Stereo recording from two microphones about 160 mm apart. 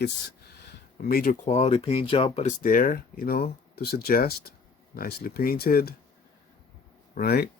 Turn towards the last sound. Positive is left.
turn(degrees=75)  # may be behind; listen again after turning